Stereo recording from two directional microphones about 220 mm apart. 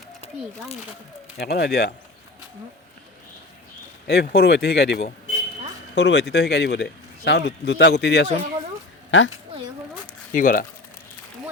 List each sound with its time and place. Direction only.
1.4 s speech: 45° left (ahead or behind)
4.0 s speech: 45° left (ahead or behind)
10.3 s speech: 40° left (ahead or behind)